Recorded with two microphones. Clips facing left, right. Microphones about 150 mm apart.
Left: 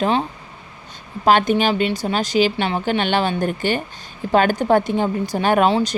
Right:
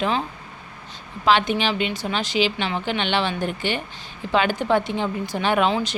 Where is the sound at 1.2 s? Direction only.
45° left (ahead or behind).